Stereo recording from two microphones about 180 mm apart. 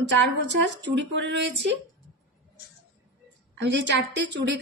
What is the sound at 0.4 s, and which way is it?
A woman's voice, 75° right (ahead or behind).